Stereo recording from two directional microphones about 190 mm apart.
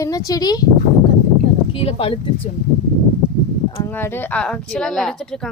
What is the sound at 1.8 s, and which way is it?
Speech, 30° left (ahead or behind).